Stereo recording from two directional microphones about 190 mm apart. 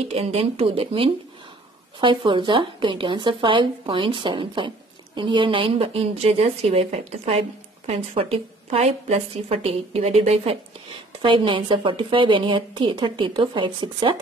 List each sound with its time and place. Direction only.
0.1 s speech: 30° right (ahead or behind)